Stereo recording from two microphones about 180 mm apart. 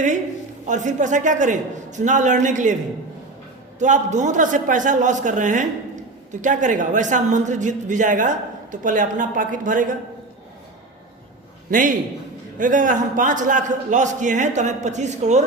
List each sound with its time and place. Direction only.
0.6 s a man's voice: 40° right (ahead or behind)
3.8 s a man's voice: 45° right (ahead or behind)
11.7 s a man's voice: 50° right (ahead or behind)